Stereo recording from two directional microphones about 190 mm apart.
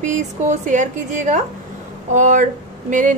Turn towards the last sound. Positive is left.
turn(degrees=-40)  # may be behind; listen again after turning